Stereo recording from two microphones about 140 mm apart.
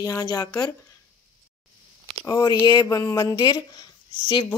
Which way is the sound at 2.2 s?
30° left (ahead or behind).